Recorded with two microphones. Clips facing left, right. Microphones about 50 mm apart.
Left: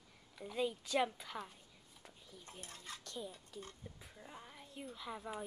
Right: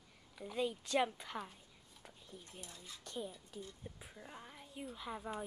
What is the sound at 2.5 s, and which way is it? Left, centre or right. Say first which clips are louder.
Speech: left 6 dB; left.